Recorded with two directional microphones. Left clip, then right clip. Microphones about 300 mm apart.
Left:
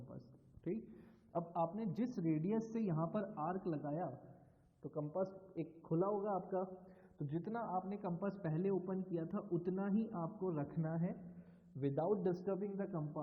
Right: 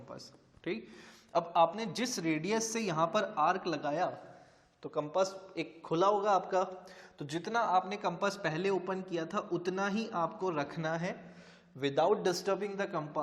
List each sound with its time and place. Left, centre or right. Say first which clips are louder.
1.3 s a man's voice: right 12 dB; centre